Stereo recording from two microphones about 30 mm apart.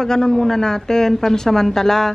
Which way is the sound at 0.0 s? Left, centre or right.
Centre.